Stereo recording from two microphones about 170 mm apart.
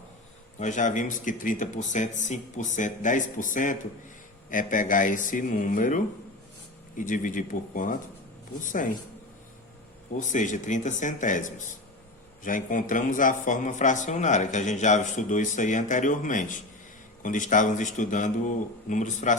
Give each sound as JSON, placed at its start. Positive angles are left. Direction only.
{"t": 0.6, "sound": "speech", "side_deg": 45}
{"t": 10.1, "sound": "speech", "side_deg": 45}